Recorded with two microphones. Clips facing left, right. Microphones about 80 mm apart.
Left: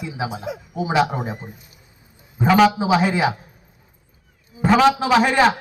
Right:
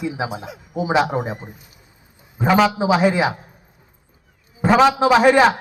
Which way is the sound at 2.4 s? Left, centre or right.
Centre.